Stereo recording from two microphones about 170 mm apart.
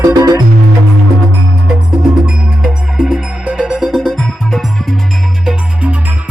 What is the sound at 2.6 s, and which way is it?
Music, 5° right (ahead or behind).